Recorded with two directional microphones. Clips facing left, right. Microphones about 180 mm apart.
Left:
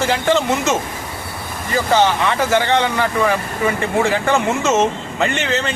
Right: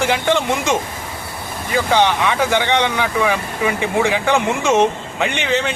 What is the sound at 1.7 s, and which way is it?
Speech, centre (ahead or behind).